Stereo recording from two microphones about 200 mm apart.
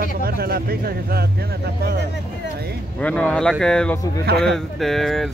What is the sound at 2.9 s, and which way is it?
Speech, 5° left (ahead or behind).